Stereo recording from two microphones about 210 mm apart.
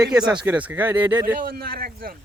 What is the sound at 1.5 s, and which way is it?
Speech, 45° right (ahead or behind).